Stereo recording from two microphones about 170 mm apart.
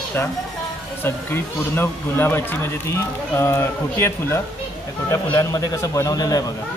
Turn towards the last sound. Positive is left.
turn(degrees=20)  # may be behind; listen again after turning